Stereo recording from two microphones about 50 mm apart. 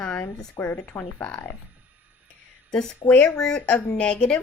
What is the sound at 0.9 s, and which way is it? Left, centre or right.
Speech, left.